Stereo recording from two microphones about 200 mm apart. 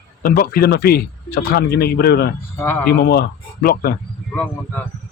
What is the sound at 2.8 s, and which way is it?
A man's voice, 55° left (ahead or behind).